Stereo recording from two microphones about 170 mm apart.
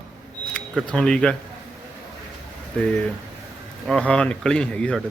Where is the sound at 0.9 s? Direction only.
5° left (ahead or behind).